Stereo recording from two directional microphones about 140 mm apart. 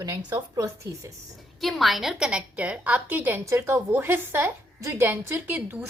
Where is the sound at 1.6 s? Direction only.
Centre (ahead or behind).